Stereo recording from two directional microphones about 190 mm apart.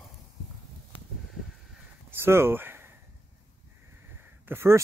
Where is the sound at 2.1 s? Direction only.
10° right (ahead or behind).